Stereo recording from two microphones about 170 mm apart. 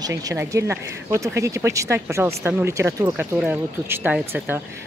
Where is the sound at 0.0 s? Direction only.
20° right (ahead or behind).